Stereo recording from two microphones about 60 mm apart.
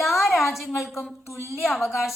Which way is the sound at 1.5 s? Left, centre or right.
Centre.